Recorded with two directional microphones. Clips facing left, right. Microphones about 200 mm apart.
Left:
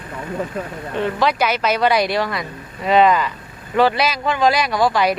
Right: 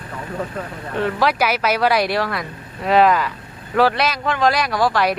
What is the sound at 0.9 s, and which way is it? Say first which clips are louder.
Speech: even; 5° right (ahead or behind).